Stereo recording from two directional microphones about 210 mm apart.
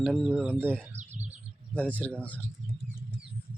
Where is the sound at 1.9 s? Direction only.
5° left (ahead or behind).